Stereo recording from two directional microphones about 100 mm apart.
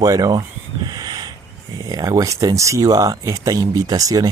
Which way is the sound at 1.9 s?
40° right (ahead or behind).